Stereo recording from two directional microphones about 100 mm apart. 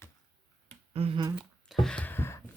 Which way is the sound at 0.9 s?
90° right.